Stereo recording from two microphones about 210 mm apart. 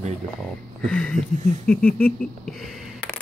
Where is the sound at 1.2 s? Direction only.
35° right (ahead or behind).